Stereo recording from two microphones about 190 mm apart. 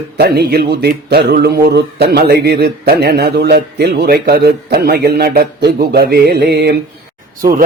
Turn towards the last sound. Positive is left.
turn(degrees=-50)  # may be behind; listen again after turning